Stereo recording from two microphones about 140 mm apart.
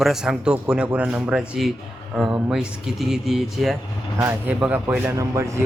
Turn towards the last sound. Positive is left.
turn(degrees=-20)  # may be behind; listen again after turning